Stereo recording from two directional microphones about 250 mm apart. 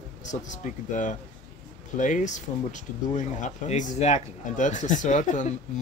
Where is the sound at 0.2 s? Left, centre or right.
Left.